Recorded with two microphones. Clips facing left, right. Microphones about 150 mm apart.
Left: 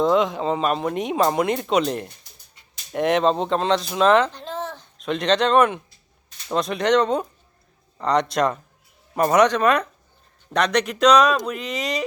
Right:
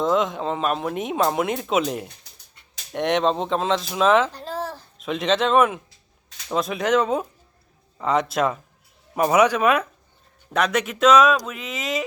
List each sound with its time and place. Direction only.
0.0 s speech: centre (ahead or behind)